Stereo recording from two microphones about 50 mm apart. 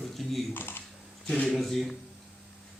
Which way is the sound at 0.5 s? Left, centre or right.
Left.